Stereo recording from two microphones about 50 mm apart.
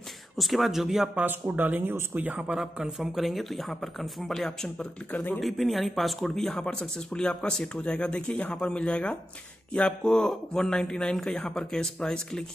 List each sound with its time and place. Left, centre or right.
0.4 s speech: centre
1.2 s speech: right
2.8 s speech: centre
5.4 s speech: centre